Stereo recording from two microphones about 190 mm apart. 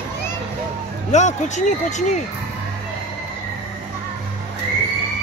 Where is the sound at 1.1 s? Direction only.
40° left (ahead or behind).